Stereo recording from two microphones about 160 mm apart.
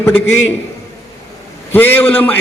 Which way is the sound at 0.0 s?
10° left (ahead or behind).